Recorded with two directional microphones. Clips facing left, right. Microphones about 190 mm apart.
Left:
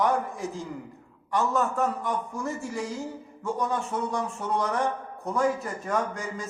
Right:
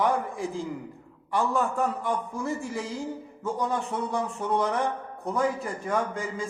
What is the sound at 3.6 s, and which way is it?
A man's voice, 15° right (ahead or behind).